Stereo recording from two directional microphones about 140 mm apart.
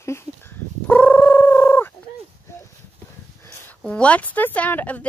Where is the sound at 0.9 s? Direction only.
10° left (ahead or behind).